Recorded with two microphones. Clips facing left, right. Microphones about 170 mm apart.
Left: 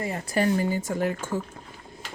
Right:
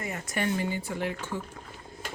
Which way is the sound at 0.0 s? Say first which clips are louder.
Left 6 dB; 30° left (ahead or behind).